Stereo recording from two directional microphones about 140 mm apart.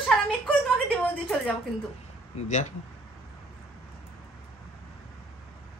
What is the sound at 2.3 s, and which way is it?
Speech, 60° left (ahead or behind).